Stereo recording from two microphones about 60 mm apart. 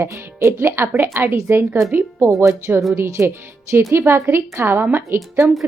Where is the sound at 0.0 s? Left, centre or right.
Right.